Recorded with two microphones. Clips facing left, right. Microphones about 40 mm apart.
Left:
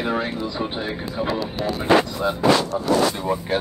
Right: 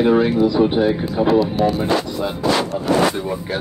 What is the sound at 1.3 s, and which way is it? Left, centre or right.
Speech, right.